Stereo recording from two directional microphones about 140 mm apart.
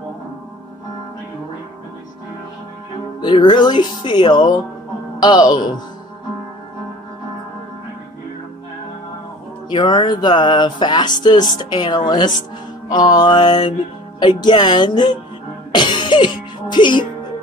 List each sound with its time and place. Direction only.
3.2 s music: 30° left (ahead or behind)
9.7 s music: 35° left (ahead or behind)